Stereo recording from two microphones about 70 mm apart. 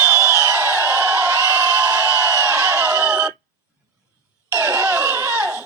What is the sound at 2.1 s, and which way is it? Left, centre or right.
Crowd, right.